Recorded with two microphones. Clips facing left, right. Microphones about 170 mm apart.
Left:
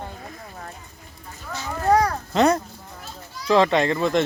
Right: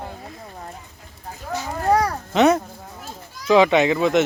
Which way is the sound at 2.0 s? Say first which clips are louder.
Right 2 dB; 5° right (ahead or behind).